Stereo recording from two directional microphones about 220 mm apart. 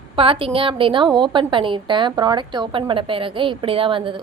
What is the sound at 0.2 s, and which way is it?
A woman's voice, 25° right (ahead or behind).